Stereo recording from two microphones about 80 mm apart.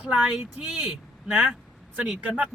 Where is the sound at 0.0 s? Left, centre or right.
Centre.